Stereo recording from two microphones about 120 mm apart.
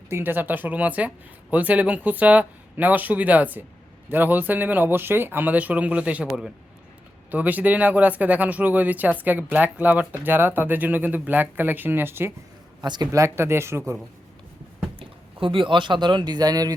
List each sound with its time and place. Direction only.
0.1 s a man's voice: 15° right (ahead or behind)
12.8 s a man's voice: 35° right (ahead or behind)
13.1 s speech: 25° right (ahead or behind)
14.9 s speech: 45° right (ahead or behind)